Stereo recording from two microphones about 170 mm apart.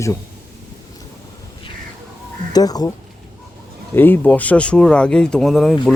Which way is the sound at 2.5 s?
20° left (ahead or behind).